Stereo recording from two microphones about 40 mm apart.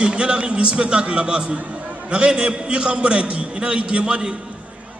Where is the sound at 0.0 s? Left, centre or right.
Right.